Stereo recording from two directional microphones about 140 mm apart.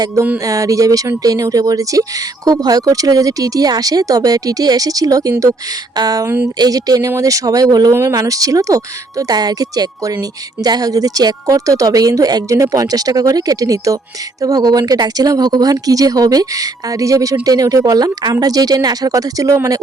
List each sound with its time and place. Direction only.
0.4 s speech: 25° right (ahead or behind)